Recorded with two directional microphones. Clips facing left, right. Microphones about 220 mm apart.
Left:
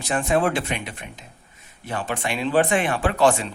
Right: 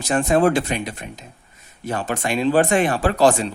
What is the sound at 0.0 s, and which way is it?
Speech, 40° right (ahead or behind).